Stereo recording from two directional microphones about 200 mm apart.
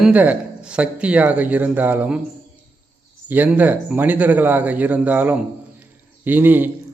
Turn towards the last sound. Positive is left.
turn(degrees=-10)  # may be behind; listen again after turning